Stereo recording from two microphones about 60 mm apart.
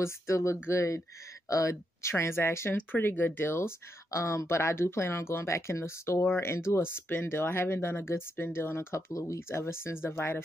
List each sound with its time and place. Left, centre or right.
0.0 s speech: left
2.1 s speech: left
2.9 s speech: left
4.1 s speech: left